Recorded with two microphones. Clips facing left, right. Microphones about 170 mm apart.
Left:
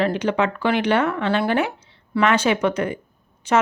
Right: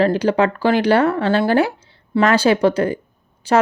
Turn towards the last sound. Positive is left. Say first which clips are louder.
# right 3 dB
turn(degrees=-35)  # may be behind; listen again after turning